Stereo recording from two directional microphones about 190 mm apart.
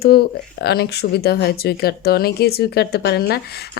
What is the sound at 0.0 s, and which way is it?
Speech, 55° left (ahead or behind).